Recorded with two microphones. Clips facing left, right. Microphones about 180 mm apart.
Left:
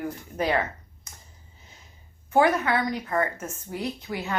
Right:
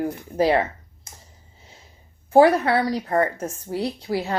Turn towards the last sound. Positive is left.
turn(degrees=-35)  # may be behind; listen again after turning